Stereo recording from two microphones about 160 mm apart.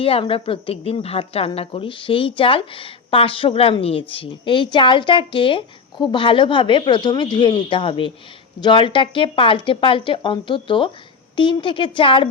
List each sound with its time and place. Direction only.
0.0 s a woman's voice: 35° left (ahead or behind)